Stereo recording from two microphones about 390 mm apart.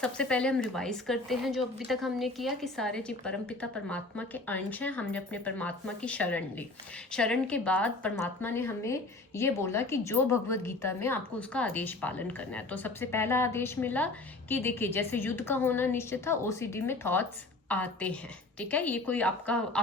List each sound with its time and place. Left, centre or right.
0.0 s a woman's voice: centre